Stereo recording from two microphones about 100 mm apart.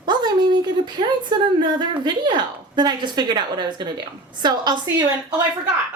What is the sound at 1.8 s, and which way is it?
A woman's voice, 50° right (ahead or behind).